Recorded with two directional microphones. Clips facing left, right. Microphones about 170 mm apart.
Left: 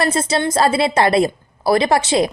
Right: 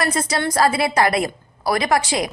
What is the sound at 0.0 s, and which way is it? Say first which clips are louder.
A woman's voice: left 3 dB; 25° left (ahead or behind).